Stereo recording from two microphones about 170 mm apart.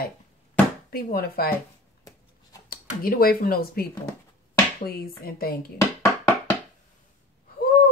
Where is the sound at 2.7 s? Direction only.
60° left (ahead or behind).